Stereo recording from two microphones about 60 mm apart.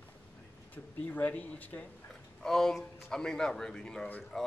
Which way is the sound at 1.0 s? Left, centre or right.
Left.